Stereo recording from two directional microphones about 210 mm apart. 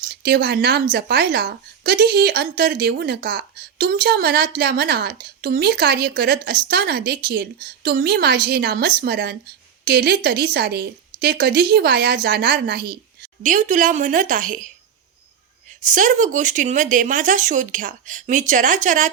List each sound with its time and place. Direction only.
0.0 s speech: 50° right (ahead or behind)
13.4 s speech: 40° right (ahead or behind)
15.8 s speech: 40° right (ahead or behind)